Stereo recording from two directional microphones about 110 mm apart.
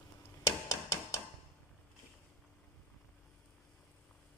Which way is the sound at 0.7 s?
30° left (ahead or behind).